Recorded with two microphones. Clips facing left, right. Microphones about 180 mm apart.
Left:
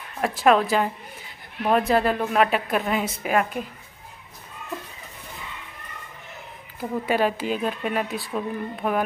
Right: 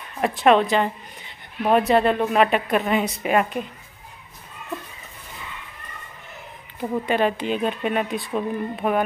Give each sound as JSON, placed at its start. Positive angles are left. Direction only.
{"t": 0.2, "sound": "a woman's voice", "side_deg": 0}
{"t": 6.8, "sound": "a woman's voice", "side_deg": 5}